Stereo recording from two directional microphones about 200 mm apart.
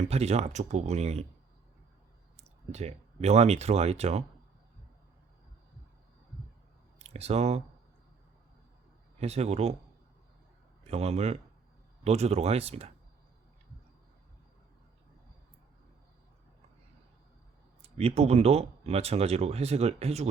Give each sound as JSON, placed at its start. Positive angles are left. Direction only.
{"t": 0.1, "sound": "speech", "side_deg": -30}
{"t": 2.3, "sound": "speech", "side_deg": -35}
{"t": 7.0, "sound": "speech", "side_deg": -30}
{"t": 9.2, "sound": "speech", "side_deg": -30}
{"t": 10.8, "sound": "speech", "side_deg": -30}
{"t": 17.8, "sound": "speech", "side_deg": -30}